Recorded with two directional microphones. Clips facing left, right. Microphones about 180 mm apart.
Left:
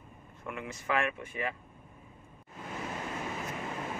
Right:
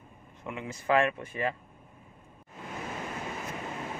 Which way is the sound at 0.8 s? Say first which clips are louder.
Right 6 dB; 35° right (ahead or behind).